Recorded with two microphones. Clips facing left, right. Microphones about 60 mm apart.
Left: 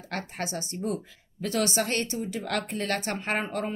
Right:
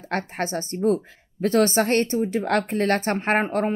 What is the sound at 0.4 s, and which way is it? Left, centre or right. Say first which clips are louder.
A woman's voice: right 8 dB; right.